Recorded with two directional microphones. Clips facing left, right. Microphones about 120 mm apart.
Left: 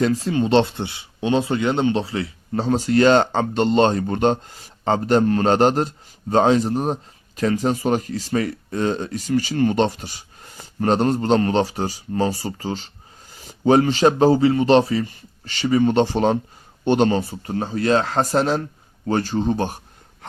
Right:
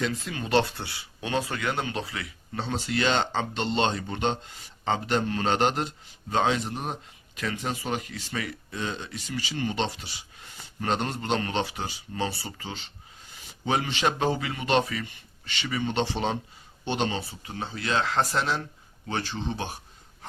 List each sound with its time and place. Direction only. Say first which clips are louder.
0.0 s speech: left 11 dB; 35° left (ahead or behind)